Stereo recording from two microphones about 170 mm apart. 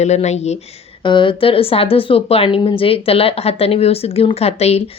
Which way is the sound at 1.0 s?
30° left (ahead or behind).